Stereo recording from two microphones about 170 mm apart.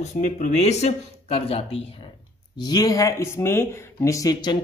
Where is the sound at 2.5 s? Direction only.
25° left (ahead or behind).